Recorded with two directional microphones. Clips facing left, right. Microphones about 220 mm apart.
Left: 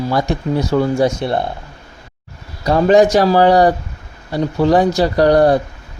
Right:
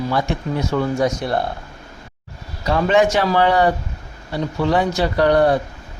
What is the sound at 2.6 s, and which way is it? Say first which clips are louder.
Speech: left 5 dB; 35° left (ahead or behind).